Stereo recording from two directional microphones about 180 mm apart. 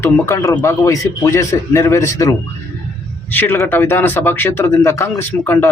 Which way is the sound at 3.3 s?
10° left (ahead or behind).